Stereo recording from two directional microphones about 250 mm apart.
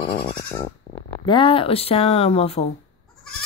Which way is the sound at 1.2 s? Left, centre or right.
Centre.